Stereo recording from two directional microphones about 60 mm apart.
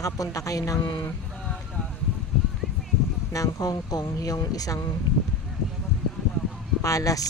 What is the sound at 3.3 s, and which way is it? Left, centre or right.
Speech, left.